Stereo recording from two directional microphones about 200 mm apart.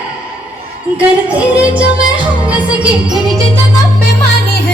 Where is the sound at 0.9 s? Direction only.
5° right (ahead or behind).